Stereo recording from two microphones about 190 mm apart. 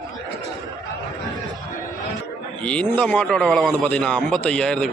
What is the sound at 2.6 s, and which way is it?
A man's voice, 5° left (ahead or behind).